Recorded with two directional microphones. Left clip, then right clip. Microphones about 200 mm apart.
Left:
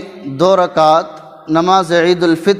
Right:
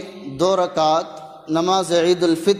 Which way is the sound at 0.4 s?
30° left (ahead or behind).